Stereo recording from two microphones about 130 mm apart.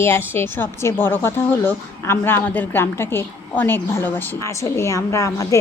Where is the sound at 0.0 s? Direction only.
20° left (ahead or behind).